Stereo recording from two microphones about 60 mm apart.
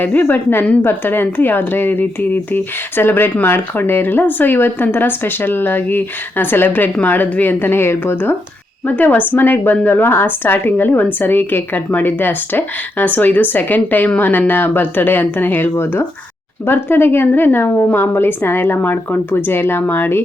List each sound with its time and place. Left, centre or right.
0.0 s a woman's voice: left